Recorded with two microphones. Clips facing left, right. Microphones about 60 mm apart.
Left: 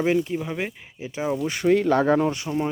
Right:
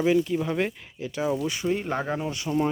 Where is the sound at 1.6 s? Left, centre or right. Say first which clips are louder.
Left 8 dB; left.